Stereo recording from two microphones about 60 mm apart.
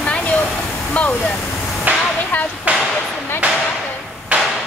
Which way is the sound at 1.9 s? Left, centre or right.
Right.